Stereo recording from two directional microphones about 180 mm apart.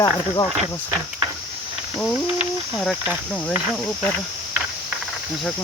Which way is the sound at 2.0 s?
5° left (ahead or behind).